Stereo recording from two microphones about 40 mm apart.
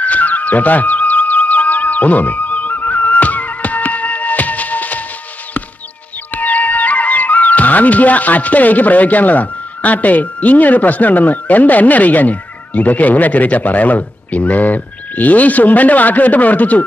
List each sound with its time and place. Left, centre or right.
0.0 s music: left
6.3 s speech: left